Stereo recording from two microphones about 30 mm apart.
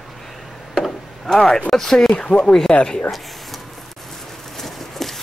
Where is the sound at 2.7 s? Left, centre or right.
Left.